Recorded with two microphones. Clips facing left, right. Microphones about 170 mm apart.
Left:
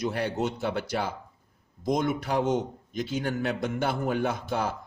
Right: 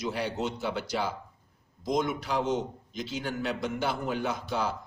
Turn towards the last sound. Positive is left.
turn(degrees=50)  # may be behind; listen again after turning